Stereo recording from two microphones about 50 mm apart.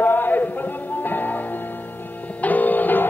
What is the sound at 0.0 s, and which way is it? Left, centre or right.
Chant, left.